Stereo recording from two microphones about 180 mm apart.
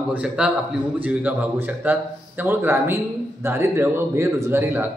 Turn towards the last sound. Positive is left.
turn(degrees=-15)  # may be behind; listen again after turning